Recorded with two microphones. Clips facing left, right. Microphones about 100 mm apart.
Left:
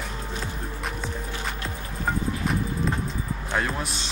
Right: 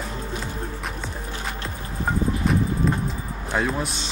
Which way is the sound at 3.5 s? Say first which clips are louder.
Right 4 dB; centre (ahead or behind).